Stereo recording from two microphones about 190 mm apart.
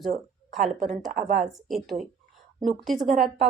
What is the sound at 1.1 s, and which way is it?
Speech, 50° right (ahead or behind).